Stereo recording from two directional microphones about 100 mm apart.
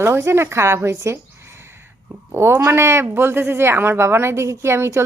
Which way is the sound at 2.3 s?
25° right (ahead or behind).